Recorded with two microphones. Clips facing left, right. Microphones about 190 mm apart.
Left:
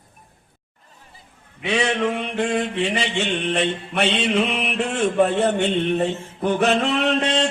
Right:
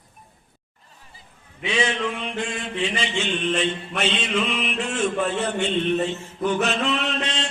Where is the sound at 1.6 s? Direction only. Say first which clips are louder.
Left 3 dB; 65° left (ahead or behind).